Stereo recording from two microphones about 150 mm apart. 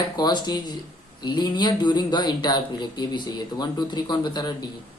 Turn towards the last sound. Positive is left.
turn(degrees=30)  # may be behind; listen again after turning